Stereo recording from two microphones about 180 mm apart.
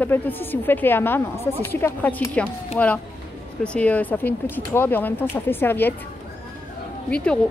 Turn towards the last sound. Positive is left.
turn(degrees=5)  # may be behind; listen again after turning